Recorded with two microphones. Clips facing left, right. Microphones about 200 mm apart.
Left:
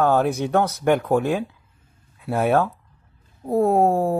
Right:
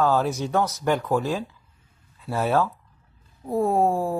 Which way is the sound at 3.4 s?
40° left (ahead or behind).